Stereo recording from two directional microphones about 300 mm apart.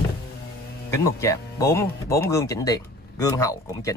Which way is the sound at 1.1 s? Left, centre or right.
Centre.